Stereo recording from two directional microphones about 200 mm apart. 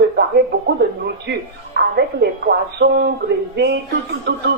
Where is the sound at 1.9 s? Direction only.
55° right (ahead or behind).